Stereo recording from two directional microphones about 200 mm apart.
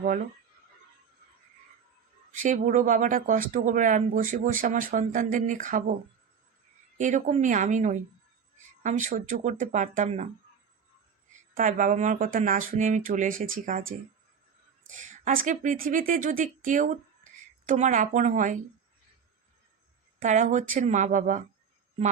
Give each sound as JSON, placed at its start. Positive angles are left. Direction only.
{"t": 2.4, "sound": "speech", "side_deg": -40}
{"t": 7.0, "sound": "speech", "side_deg": -35}
{"t": 11.5, "sound": "speech", "side_deg": -40}
{"t": 14.8, "sound": "speech", "side_deg": -40}
{"t": 20.1, "sound": "speech", "side_deg": -40}